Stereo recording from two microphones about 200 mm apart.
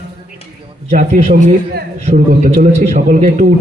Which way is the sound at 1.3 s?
50° right (ahead or behind).